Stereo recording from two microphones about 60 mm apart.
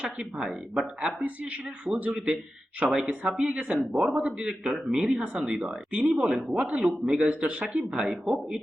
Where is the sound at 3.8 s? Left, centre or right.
Centre.